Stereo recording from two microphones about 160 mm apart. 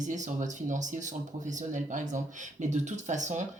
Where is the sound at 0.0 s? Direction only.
50° right (ahead or behind).